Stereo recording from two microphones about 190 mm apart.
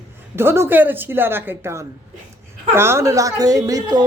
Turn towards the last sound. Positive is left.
turn(degrees=-20)  # may be behind; listen again after turning